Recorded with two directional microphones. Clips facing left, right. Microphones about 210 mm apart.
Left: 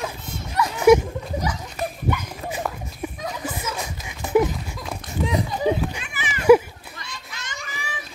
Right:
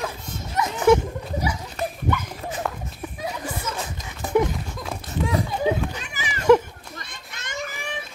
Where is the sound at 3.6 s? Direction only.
10° left (ahead or behind).